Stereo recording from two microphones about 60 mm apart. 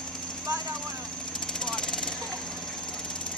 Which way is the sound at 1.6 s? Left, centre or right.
Centre.